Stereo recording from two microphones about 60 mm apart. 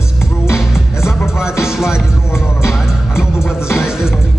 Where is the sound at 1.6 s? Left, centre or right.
Centre.